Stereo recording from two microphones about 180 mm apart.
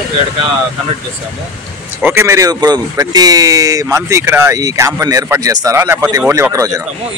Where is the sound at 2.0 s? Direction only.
15° right (ahead or behind).